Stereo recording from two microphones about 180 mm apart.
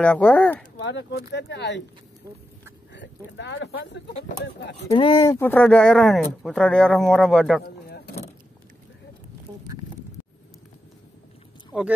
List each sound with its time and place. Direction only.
0.0 s speech: 10° left (ahead or behind)
0.7 s speech: 75° left (ahead or behind)
2.9 s speech: 80° left
4.8 s speech: 25° left (ahead or behind)
5.4 s speech: 10° left (ahead or behind)
11.7 s speech: 5° right (ahead or behind)